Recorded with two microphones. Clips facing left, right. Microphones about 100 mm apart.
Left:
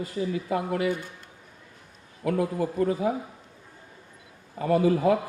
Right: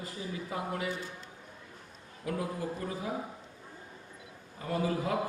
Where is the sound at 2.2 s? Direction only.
75° left (ahead or behind).